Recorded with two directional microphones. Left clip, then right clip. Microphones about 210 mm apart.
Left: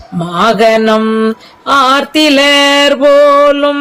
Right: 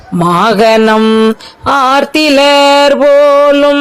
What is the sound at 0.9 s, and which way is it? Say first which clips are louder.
Music: right 3 dB; 15° right (ahead or behind).